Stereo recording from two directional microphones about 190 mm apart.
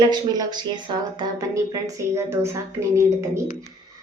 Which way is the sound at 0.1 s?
20° right (ahead or behind).